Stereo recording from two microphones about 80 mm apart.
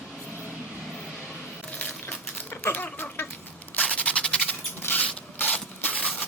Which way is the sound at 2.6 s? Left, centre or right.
Left.